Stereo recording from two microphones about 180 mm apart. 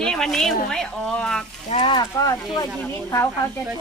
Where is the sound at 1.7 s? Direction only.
25° left (ahead or behind).